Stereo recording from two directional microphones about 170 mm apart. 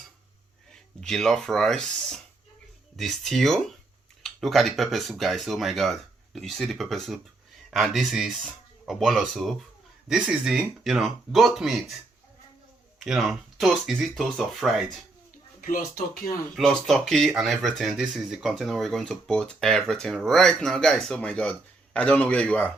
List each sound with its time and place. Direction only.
0.7 s speech: centre (ahead or behind)
13.0 s speech: centre (ahead or behind)
15.6 s speech: 60° left (ahead or behind)
16.6 s speech: centre (ahead or behind)